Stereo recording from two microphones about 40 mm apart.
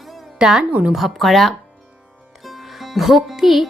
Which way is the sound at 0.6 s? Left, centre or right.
Right.